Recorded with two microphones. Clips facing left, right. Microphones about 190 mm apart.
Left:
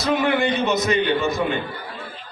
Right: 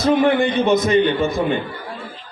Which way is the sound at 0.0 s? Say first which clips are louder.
Right 5 dB; 55° right (ahead or behind).